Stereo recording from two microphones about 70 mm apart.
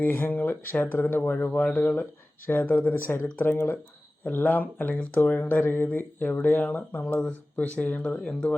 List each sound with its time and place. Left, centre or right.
0.0 s speech: left
8.1 s speech: centre